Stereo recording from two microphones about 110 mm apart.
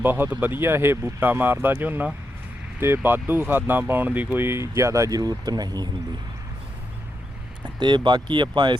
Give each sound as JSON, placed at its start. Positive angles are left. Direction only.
{"t": 0.0, "sound": "speech", "side_deg": -15}
{"t": 7.8, "sound": "speech", "side_deg": -45}